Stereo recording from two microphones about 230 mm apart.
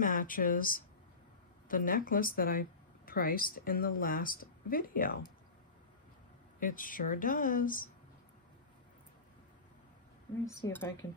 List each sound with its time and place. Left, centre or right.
0.0 s a woman's voice: left
6.6 s a woman's voice: left
10.5 s a woman's voice: centre